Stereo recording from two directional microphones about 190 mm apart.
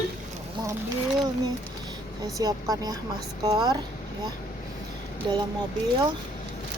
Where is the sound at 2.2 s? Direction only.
20° right (ahead or behind).